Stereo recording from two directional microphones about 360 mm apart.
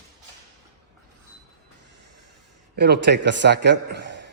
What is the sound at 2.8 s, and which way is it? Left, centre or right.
A man's voice, right.